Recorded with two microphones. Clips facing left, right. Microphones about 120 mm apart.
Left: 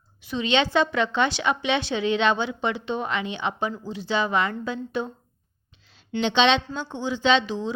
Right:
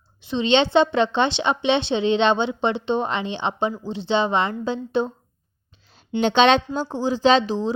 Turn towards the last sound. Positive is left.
turn(degrees=-35)  # may be behind; listen again after turning